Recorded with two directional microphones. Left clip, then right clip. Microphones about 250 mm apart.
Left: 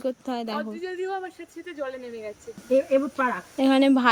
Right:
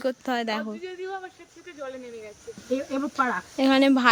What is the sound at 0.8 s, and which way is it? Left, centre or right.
Speech, left.